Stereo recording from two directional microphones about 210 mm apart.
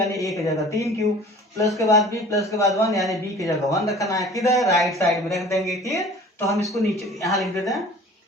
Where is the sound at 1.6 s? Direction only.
15° left (ahead or behind).